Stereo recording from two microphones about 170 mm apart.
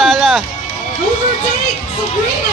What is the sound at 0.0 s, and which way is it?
Run, centre (ahead or behind).